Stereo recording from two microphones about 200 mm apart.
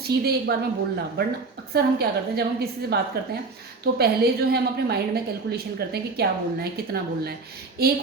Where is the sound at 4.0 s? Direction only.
50° right (ahead or behind).